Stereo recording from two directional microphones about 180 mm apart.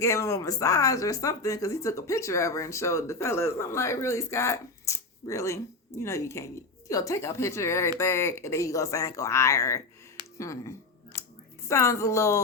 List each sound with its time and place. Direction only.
0.0 s speech: 15° left (ahead or behind)